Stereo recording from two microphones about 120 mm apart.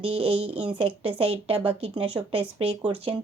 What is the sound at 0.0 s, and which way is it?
Speech, 55° right (ahead or behind).